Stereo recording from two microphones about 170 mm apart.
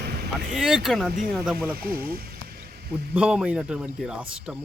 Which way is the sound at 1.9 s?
60° right (ahead or behind).